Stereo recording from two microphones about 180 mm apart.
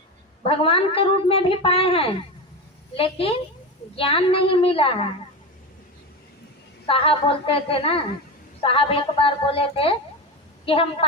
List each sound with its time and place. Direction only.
0.4 s a woman's voice: 30° left (ahead or behind)
6.8 s a woman's voice: 30° left (ahead or behind)